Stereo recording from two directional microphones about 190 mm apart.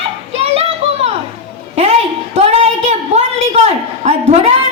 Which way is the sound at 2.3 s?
35° right (ahead or behind).